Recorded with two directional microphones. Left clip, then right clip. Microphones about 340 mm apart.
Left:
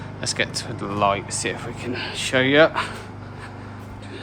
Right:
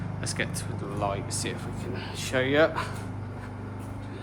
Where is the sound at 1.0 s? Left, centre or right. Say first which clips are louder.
Left 10 dB; left.